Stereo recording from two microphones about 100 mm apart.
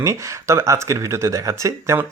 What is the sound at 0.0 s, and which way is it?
Speech, 30° right (ahead or behind).